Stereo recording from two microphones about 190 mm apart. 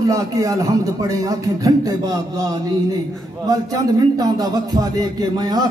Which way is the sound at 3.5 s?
20° right (ahead or behind).